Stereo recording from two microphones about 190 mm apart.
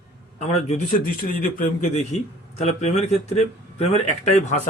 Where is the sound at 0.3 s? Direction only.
35° left (ahead or behind).